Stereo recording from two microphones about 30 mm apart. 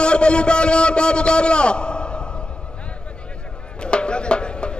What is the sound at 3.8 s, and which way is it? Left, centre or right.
Music, left.